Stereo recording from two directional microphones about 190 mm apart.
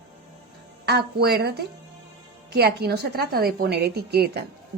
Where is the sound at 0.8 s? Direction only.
60° right (ahead or behind).